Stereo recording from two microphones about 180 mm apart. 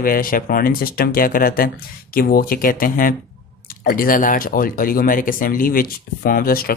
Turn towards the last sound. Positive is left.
turn(degrees=55)  # may be behind; listen again after turning